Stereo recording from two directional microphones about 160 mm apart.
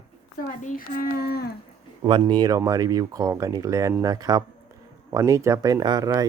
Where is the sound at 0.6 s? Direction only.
55° left (ahead or behind); by 1.5 s 75° left (ahead or behind).